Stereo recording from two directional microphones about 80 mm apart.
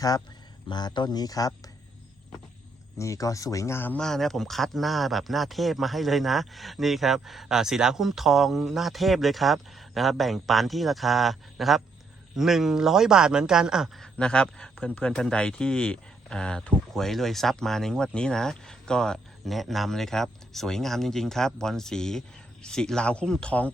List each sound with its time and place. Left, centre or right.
0.7 s speech: left
3.0 s speech: left
3.9 s speech: centre
14.2 s a man's voice: centre